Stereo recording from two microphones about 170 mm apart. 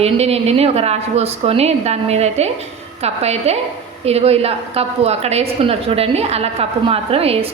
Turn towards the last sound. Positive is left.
turn(degrees=-35)  # may be behind; listen again after turning